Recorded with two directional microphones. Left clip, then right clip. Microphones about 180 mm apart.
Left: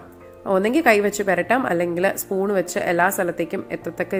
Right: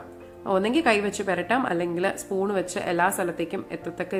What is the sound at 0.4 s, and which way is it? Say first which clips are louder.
A woman's voice: left 5 dB; 25° left (ahead or behind).